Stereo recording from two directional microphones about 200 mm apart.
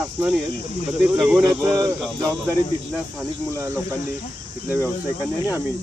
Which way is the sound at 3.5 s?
15° right (ahead or behind).